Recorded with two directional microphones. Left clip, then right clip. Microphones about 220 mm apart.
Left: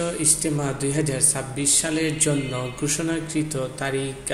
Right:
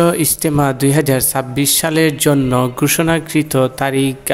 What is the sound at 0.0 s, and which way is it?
Speech, 50° right (ahead or behind).